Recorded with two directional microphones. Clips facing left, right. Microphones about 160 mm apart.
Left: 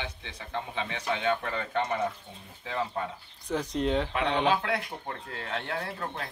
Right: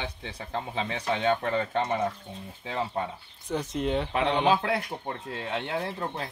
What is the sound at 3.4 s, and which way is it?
Speech, centre (ahead or behind).